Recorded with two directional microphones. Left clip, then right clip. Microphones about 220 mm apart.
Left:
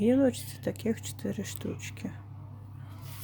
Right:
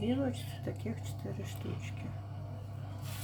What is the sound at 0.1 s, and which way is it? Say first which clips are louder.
Speech: left 9 dB; 50° left (ahead or behind).